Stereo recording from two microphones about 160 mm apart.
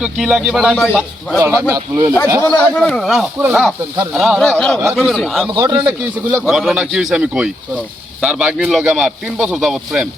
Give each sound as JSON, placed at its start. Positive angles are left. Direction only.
{"t": 0.0, "sound": "a man's voice", "side_deg": -5}
{"t": 1.4, "sound": "speech", "side_deg": -20}
{"t": 2.4, "sound": "a man's voice", "side_deg": 10}
{"t": 5.5, "sound": "speech", "side_deg": -25}
{"t": 5.8, "sound": "speech", "side_deg": -10}
{"t": 6.4, "sound": "a man's voice", "side_deg": 0}